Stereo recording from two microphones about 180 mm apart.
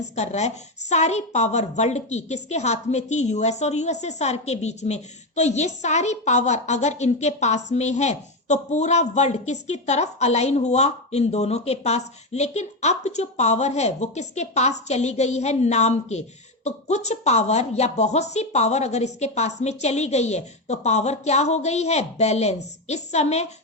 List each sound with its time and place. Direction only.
0.0 s a woman's voice: 40° left (ahead or behind)